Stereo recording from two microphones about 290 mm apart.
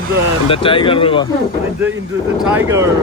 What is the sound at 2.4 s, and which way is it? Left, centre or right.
Speech, centre.